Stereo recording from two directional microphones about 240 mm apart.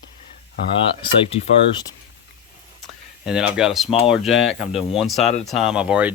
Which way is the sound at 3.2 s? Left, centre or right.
Centre.